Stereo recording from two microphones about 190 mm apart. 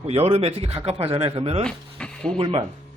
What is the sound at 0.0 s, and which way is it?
Speech, 30° right (ahead or behind).